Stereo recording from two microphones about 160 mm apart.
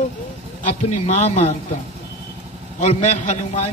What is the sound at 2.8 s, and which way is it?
Speech, 45° left (ahead or behind).